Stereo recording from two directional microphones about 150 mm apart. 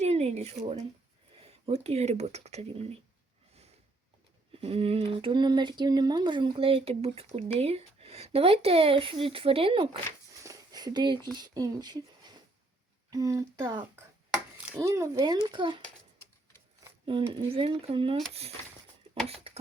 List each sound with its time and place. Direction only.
0.0 s a sound: 45° right (ahead or behind)
1.5 s speech: 45° right (ahead or behind)
4.6 s speech: 40° right (ahead or behind)
10.4 s a sound: 25° right (ahead or behind)
11.3 s speech: 25° right (ahead or behind)
13.1 s speech: 25° right (ahead or behind)
14.8 s speech: 20° right (ahead or behind)
17.1 s speech: 35° right (ahead or behind)
19.5 s a sound: 40° right (ahead or behind)